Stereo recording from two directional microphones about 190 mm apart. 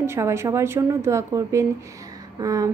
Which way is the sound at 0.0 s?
15° right (ahead or behind).